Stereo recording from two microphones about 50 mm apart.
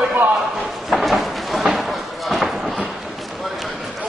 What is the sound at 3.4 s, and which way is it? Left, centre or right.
Basketball bounce, centre.